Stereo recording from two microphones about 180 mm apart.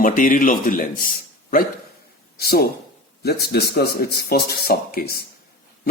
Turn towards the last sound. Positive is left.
turn(degrees=60)  # may be behind; listen again after turning